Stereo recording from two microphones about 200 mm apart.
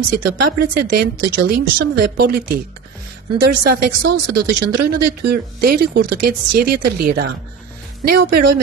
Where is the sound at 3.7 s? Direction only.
50° right (ahead or behind).